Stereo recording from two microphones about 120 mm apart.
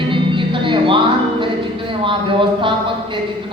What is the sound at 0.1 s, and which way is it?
Music, 45° right (ahead or behind).